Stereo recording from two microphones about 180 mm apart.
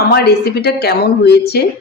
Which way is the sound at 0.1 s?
60° left (ahead or behind).